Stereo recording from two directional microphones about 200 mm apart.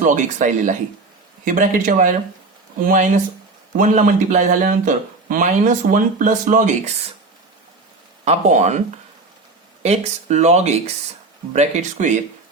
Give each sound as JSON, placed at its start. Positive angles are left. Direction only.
{"t": 0.0, "sound": "speech", "side_deg": -40}
{"t": 8.2, "sound": "speech", "side_deg": -35}
{"t": 9.8, "sound": "speech", "side_deg": -35}